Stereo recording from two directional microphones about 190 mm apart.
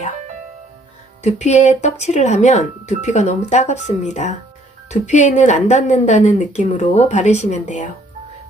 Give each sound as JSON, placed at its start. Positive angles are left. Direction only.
{"t": 1.2, "sound": "speech", "side_deg": 35}